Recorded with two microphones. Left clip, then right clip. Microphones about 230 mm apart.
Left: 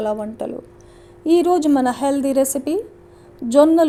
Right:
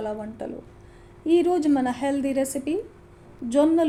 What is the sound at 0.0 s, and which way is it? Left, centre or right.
A woman's voice, left.